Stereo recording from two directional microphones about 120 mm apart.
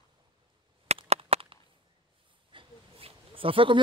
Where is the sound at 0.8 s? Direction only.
60° right (ahead or behind).